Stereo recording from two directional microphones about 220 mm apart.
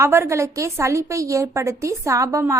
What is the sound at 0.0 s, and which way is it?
A woman's voice, 10° right (ahead or behind).